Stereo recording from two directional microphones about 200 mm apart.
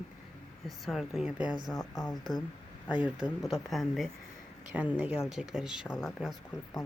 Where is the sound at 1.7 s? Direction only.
20° left (ahead or behind).